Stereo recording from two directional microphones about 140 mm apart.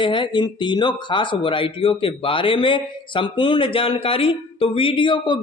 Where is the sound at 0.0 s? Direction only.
35° left (ahead or behind).